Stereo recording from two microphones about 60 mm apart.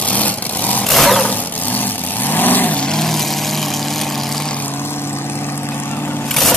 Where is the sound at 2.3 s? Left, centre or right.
Left.